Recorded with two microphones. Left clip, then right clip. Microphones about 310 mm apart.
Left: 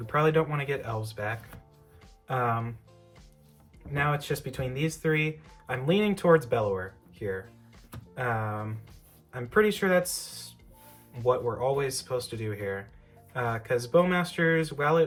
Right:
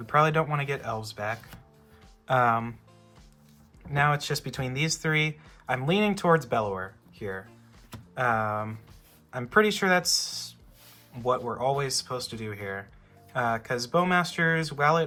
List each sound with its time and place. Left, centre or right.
0.0 s speech: centre
3.9 s speech: centre